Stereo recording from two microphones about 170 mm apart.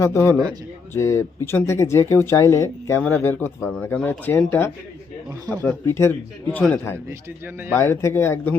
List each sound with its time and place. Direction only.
0.0 s speech: 15° left (ahead or behind)
7.1 s a man's voice: 10° right (ahead or behind)
7.8 s speech: 15° left (ahead or behind)